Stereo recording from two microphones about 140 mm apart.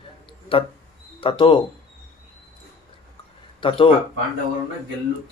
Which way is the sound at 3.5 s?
40° left (ahead or behind).